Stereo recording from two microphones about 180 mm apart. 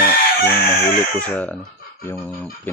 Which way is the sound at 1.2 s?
10° left (ahead or behind).